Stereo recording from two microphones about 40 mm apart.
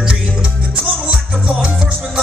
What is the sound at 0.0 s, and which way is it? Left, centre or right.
Music, right.